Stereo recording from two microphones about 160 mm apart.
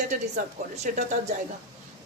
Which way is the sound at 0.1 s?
45° right (ahead or behind).